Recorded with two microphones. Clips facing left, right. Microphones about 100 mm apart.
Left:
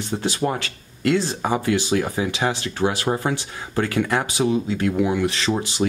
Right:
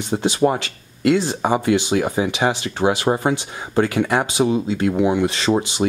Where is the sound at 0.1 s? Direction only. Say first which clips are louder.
Right 6 dB; 20° right (ahead or behind).